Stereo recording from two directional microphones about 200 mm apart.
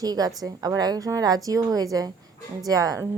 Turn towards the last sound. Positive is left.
turn(degrees=-15)  # may be behind; listen again after turning